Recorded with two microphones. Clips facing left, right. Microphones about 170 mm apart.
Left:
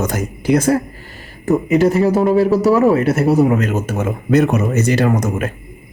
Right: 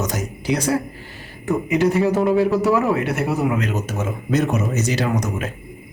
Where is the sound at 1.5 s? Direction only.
40° left (ahead or behind).